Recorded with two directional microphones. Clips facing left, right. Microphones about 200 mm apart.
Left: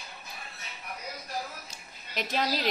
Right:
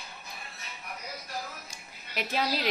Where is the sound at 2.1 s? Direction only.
10° right (ahead or behind).